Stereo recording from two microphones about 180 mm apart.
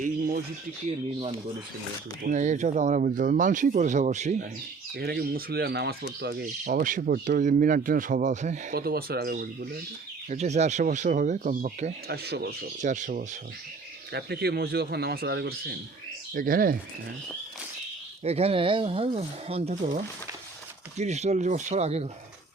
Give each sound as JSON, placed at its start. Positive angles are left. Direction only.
{"t": 0.0, "sound": "a sound", "side_deg": -55}
{"t": 2.2, "sound": "speech", "side_deg": -45}
{"t": 4.9, "sound": "speech", "side_deg": -60}
{"t": 8.7, "sound": "speech", "side_deg": -55}
{"t": 10.2, "sound": "speech", "side_deg": -40}
{"t": 12.0, "sound": "speech", "side_deg": -60}
{"t": 12.8, "sound": "speech", "side_deg": -45}
{"t": 14.1, "sound": "speech", "side_deg": -65}
{"t": 16.3, "sound": "speech", "side_deg": -55}
{"t": 18.2, "sound": "speech", "side_deg": -35}
{"t": 21.0, "sound": "speech", "side_deg": -40}